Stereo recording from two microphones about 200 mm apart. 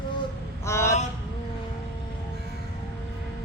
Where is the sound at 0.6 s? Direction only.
15° left (ahead or behind).